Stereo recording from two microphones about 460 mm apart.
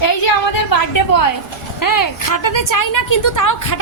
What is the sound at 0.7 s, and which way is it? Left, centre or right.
A woman's voice, left.